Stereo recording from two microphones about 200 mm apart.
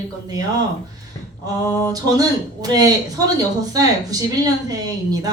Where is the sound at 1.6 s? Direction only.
15° left (ahead or behind).